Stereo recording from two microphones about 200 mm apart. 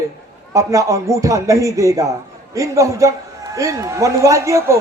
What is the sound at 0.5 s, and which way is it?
A man's voice, 15° right (ahead or behind).